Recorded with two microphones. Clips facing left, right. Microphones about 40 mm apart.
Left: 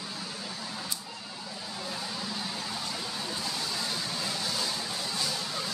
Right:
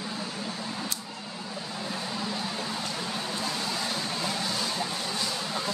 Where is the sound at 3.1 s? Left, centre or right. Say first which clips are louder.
Right 3 dB; right.